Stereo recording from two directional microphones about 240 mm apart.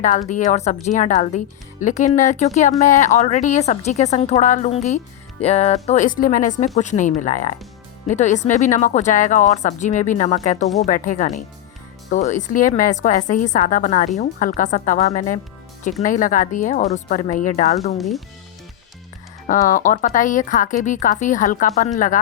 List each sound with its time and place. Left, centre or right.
0.0 s a woman's voice: left
17.9 s speech: centre
19.5 s speech: left